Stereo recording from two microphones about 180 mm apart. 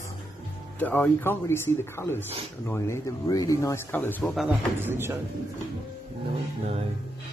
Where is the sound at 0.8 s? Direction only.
10° left (ahead or behind).